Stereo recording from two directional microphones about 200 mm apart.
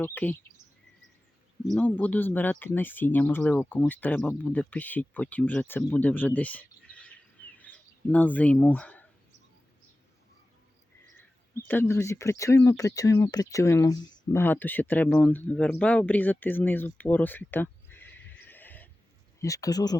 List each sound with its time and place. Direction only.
0.0 s speech: 10° left (ahead or behind)
1.7 s speech: 5° left (ahead or behind)
11.7 s speech: 10° left (ahead or behind)